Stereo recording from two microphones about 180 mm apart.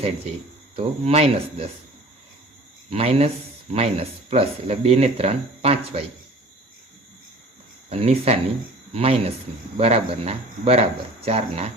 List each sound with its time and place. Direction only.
0.8 s speech: 35° right (ahead or behind)
2.9 s speech: 35° right (ahead or behind)
7.9 s speech: 35° right (ahead or behind)